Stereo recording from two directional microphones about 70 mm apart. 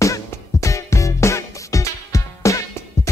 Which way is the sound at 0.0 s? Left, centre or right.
Left.